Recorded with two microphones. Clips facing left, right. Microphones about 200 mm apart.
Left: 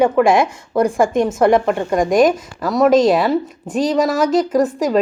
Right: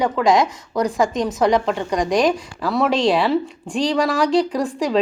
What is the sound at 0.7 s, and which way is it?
Speech, 55° left (ahead or behind).